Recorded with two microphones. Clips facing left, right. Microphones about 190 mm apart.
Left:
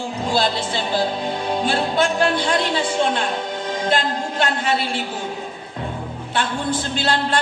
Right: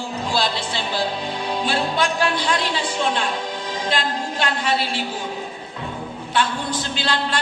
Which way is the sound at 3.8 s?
50° left (ahead or behind).